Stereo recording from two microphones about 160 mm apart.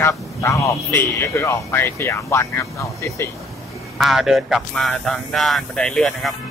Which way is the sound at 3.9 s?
Centre (ahead or behind).